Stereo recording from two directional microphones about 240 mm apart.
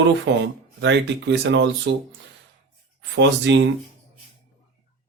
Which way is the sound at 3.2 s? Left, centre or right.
Right.